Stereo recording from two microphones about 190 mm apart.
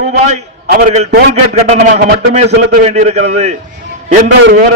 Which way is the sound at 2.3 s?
35° right (ahead or behind).